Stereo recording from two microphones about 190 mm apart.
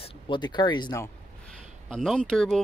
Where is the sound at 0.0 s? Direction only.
25° left (ahead or behind).